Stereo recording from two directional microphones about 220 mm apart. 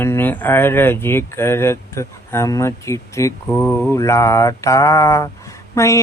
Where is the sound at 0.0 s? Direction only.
10° left (ahead or behind).